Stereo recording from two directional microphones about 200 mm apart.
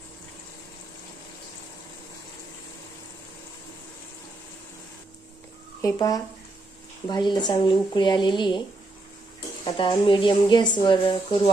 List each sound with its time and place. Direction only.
5.8 s a woman's voice: 15° left (ahead or behind)
9.6 s a woman's voice: 25° left (ahead or behind)